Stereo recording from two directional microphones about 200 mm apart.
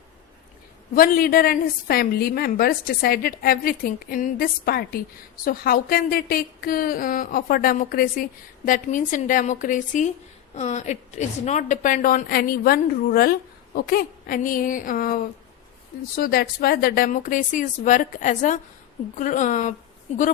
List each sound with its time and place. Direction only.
0.9 s a woman's voice: 45° left (ahead or behind)